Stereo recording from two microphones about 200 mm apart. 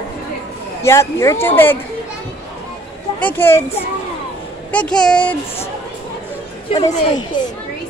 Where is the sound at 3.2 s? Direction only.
10° left (ahead or behind).